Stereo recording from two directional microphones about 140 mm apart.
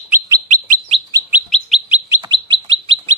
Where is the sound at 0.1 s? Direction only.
25° right (ahead or behind).